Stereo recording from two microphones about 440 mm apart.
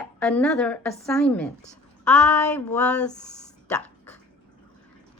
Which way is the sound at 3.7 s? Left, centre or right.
Centre.